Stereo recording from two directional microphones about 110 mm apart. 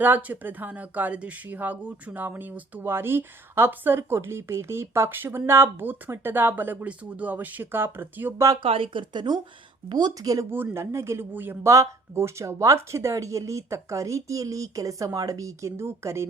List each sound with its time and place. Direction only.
0.0 s a woman's voice: 15° right (ahead or behind)
8.6 s speech: 55° right (ahead or behind); by 16.2 s 25° right (ahead or behind)